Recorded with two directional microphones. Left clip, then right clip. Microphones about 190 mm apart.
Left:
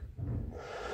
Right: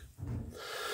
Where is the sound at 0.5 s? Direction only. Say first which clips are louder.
Right 2 dB; 15° right (ahead or behind).